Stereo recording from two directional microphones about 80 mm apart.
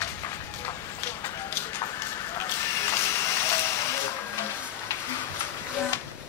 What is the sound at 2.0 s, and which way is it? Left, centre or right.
Vehicle, left.